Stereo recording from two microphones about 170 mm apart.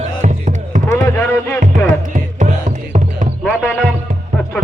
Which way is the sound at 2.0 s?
50° right (ahead or behind).